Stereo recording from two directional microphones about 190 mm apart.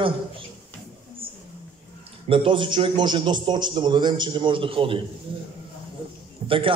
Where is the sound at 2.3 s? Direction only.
25° right (ahead or behind).